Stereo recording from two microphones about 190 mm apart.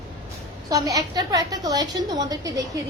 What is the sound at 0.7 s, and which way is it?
A woman's voice, 15° right (ahead or behind).